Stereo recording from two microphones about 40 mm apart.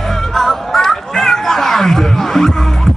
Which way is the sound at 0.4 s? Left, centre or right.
Centre.